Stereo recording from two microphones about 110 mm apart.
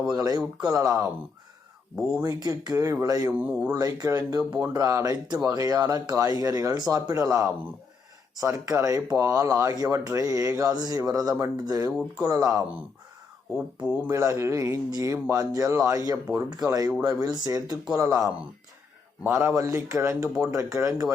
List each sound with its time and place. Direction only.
0.2 s speech: 35° right (ahead or behind)
2.4 s speech: 35° right (ahead or behind)
3.3 s speech: 15° right (ahead or behind)
3.7 s speech: 35° right (ahead or behind)
14.1 s speech: 25° right (ahead or behind)